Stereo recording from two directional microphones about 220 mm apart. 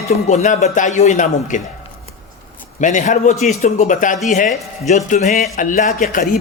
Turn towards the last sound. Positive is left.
turn(degrees=40)  # may be behind; listen again after turning